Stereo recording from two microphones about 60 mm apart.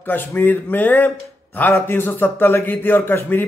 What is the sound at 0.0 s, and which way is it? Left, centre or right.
Speech, left.